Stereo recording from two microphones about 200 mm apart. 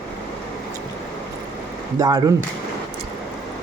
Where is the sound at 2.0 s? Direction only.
15° right (ahead or behind).